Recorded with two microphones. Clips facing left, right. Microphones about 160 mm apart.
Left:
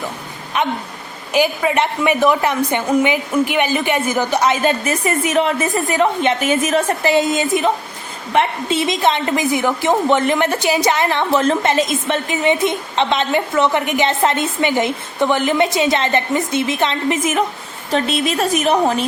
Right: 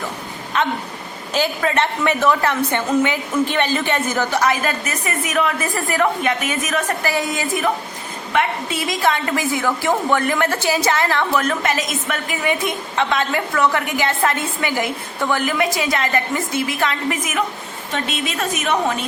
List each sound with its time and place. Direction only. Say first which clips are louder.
0.5 s a woman's voice: left 1 dB; 15° left (ahead or behind); by 18.9 s 35° left (ahead or behind)